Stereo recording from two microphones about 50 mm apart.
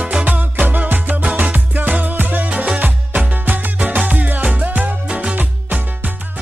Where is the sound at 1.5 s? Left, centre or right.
Right.